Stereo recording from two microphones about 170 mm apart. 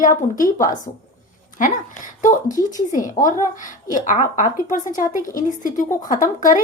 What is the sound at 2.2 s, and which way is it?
A woman's voice, 50° left (ahead or behind).